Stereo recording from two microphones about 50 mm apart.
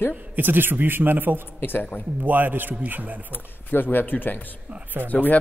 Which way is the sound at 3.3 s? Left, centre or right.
Left.